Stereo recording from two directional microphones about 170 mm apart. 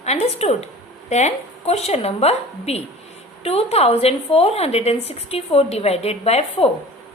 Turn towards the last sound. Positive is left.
turn(degrees=35)  # may be behind; listen again after turning